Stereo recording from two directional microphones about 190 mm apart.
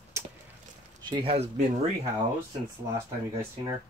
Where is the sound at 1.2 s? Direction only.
30° right (ahead or behind).